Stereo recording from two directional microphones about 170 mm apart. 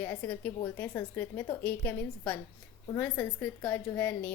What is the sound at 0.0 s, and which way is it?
A woman's voice, 10° left (ahead or behind).